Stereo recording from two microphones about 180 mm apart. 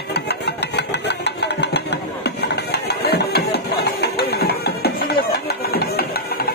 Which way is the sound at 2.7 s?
65° left (ahead or behind).